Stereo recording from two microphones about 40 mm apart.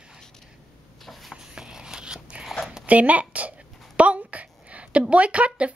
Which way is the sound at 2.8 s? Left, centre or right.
Right.